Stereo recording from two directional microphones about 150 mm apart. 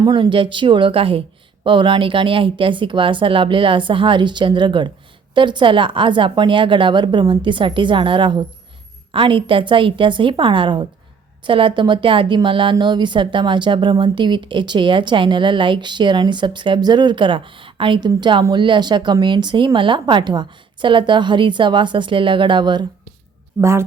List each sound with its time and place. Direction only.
0.0 s a woman's voice: 30° right (ahead or behind)
23.6 s a woman's voice: 15° right (ahead or behind)